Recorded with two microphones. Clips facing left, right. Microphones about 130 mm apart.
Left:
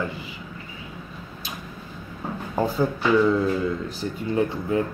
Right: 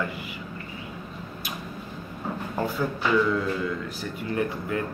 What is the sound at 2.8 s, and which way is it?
Speech, 25° left (ahead or behind).